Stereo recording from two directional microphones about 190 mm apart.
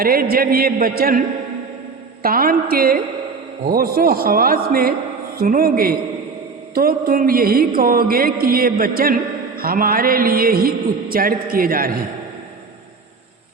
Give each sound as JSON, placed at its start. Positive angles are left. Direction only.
{"t": 0.0, "sound": "music", "side_deg": -50}
{"t": 2.2, "sound": "music", "side_deg": -50}